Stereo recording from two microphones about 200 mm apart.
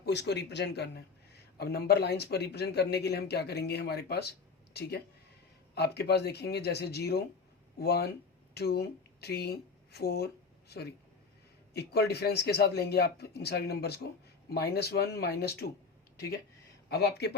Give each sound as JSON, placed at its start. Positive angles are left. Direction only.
{"t": 0.0, "sound": "a man's voice", "side_deg": 55}
{"t": 11.7, "sound": "a man's voice", "side_deg": 55}
{"t": 16.9, "sound": "speech", "side_deg": 55}